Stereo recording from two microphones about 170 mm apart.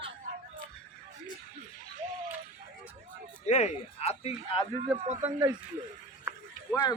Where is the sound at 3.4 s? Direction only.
40° left (ahead or behind).